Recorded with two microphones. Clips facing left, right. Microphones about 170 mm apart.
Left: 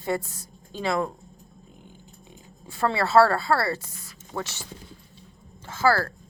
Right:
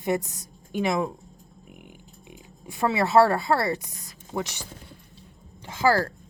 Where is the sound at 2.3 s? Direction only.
15° right (ahead or behind).